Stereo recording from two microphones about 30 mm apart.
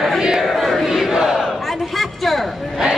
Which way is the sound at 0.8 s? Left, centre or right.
Centre.